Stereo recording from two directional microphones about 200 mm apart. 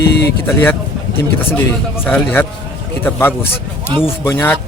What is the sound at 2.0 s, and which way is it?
Speech, 10° left (ahead or behind).